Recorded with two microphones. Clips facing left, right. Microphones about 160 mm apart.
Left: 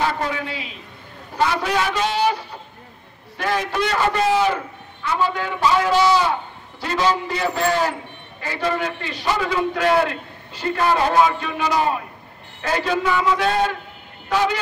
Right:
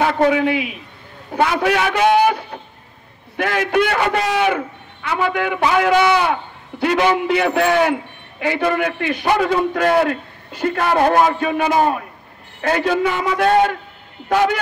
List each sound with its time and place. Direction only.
0.2 s a man's voice: 60° right (ahead or behind)